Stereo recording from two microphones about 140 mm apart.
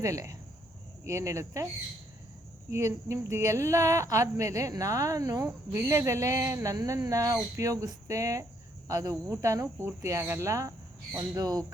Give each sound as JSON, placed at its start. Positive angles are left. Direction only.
{"t": 0.0, "sound": "speech", "side_deg": -25}
{"t": 2.7, "sound": "speech", "side_deg": -20}